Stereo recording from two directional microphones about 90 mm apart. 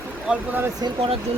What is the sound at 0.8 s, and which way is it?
Speech, 70° right (ahead or behind).